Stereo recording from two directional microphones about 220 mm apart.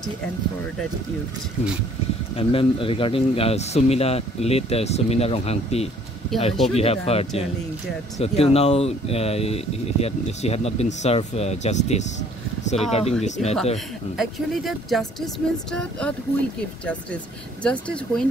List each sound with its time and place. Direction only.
2.3 s speech: 25° left (ahead or behind)
14.1 s speech: centre (ahead or behind)
17.6 s speech: 5° left (ahead or behind)